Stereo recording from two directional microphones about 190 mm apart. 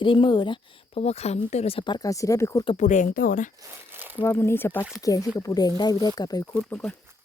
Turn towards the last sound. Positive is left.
turn(degrees=5)  # may be behind; listen again after turning